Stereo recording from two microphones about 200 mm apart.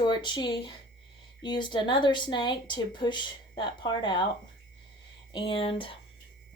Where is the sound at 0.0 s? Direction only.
20° left (ahead or behind).